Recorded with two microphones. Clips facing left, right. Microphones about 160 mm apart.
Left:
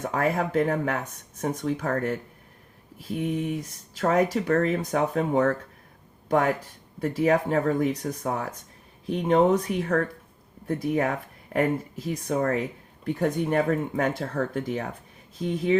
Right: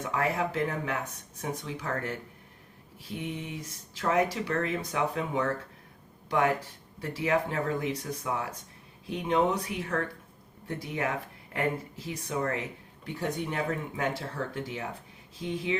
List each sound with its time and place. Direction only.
0.1 s speech: 50° left (ahead or behind)
3.2 s speech: 55° left (ahead or behind)